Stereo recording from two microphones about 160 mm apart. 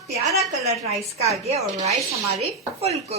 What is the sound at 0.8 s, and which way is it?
A woman's voice, 40° right (ahead or behind).